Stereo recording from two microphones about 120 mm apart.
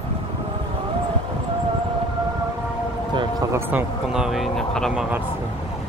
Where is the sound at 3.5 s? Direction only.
20° right (ahead or behind).